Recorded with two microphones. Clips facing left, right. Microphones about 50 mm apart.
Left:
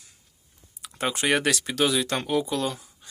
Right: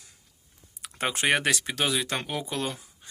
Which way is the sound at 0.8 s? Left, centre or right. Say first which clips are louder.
Left 1 dB; right.